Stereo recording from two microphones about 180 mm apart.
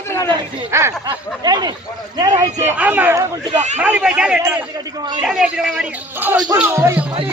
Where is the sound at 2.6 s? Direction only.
10° right (ahead or behind).